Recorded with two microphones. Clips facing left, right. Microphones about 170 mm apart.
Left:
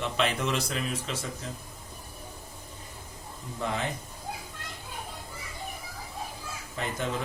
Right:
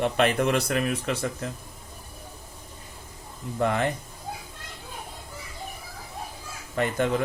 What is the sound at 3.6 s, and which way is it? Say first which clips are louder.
Speech: right 7 dB; 60° right (ahead or behind).